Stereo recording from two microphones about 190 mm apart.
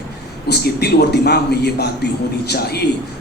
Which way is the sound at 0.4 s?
55° left (ahead or behind).